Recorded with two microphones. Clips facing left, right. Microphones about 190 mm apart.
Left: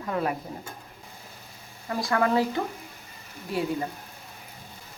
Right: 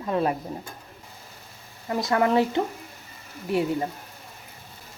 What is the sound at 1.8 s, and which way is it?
Speech, 20° right (ahead or behind).